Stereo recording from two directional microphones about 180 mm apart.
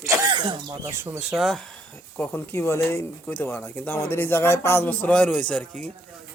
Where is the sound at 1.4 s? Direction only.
Centre (ahead or behind).